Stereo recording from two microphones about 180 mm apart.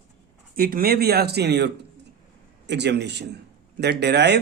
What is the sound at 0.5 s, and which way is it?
Speech, 55° right (ahead or behind).